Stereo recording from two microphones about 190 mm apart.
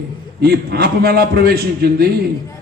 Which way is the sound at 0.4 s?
55° right (ahead or behind).